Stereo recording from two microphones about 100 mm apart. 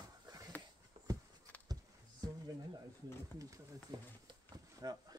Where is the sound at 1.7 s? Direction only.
40° right (ahead or behind).